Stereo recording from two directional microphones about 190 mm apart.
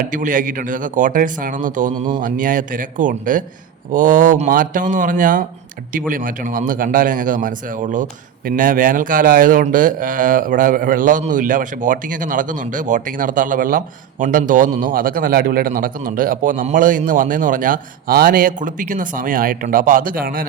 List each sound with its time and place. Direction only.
0.0 s speech: 45° right (ahead or behind)